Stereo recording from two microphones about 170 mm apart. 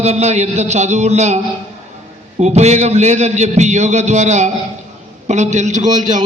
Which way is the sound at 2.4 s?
40° right (ahead or behind).